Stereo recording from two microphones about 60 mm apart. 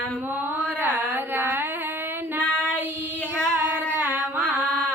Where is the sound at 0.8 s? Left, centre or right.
Right.